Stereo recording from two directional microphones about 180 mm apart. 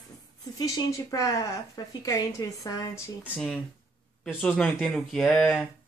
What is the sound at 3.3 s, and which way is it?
Speech, 5° right (ahead or behind).